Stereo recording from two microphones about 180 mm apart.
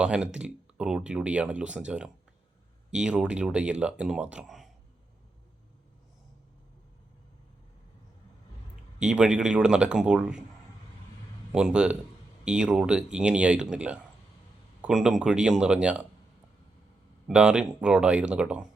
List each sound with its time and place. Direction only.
0.0 s speech: 5° right (ahead or behind)
9.0 s speech: 5° right (ahead or behind)
11.5 s speech: 5° right (ahead or behind)
17.2 s speech: 5° right (ahead or behind)